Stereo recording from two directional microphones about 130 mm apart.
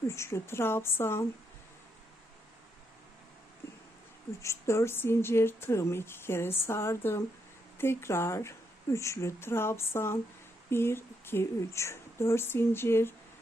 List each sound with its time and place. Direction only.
0.1 s speech: 20° left (ahead or behind)
4.4 s speech: 20° left (ahead or behind)